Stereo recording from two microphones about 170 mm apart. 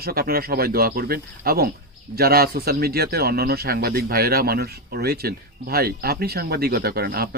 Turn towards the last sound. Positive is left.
turn(degrees=-65)  # may be behind; listen again after turning